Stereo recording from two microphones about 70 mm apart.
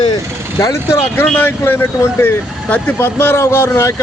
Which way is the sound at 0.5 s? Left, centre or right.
Left.